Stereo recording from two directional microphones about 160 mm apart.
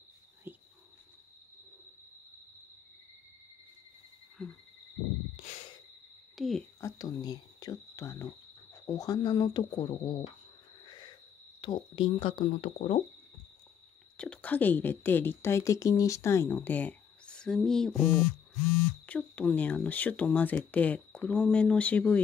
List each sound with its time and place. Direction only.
0.5 s cricket: 15° right (ahead or behind)
5.3 s sigh: 50° left (ahead or behind)
6.3 s a sound: centre (ahead or behind)
6.8 s speech: 20° left (ahead or behind)
10.9 s owl: 30° left (ahead or behind)
11.6 s speech: 30° left (ahead or behind)
14.1 s a woman's voice: 5° left (ahead or behind)